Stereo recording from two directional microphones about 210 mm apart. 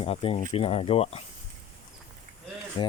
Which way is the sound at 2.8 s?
25° left (ahead or behind).